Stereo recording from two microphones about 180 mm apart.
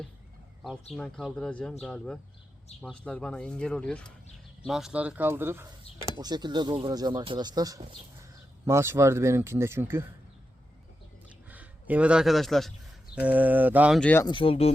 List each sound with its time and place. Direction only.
0.9 s speech: 5° left (ahead or behind); by 10.1 s 15° right (ahead or behind)
11.3 s a sound: 10° right (ahead or behind)
13.1 s speech: 10° right (ahead or behind)
14.0 s speech: 10° left (ahead or behind)
14.3 s speech: 30° left (ahead or behind)